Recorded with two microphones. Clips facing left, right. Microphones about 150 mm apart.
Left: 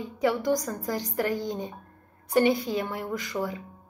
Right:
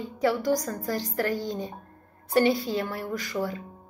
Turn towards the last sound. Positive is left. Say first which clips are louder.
# right 1 dB
turn(degrees=15)  # may be behind; listen again after turning